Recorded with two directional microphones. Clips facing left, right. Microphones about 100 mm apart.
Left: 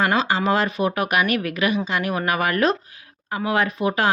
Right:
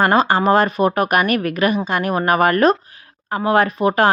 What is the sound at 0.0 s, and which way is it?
Speech, 45° right (ahead or behind).